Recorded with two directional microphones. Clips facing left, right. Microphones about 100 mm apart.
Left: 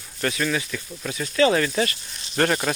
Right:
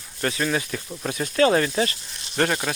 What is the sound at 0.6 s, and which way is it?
Speech, 40° right (ahead or behind).